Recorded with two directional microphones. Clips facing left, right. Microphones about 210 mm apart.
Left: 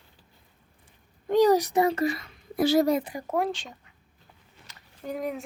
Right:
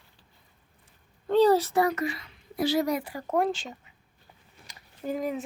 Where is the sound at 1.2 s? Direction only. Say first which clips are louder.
Even; 15° left (ahead or behind).